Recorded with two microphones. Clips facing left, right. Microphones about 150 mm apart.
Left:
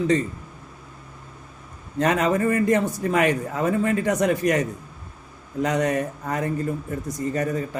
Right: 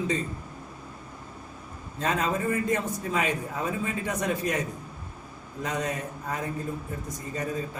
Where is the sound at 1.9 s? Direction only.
75° left (ahead or behind).